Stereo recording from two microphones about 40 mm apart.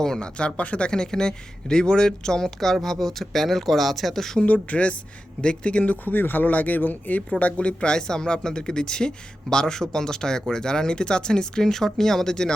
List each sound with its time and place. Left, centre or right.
0.0 s speech: centre
0.3 s speech: left
0.9 s speech: centre
4.4 s speech: left
6.1 s speech: left; by 12.5 s centre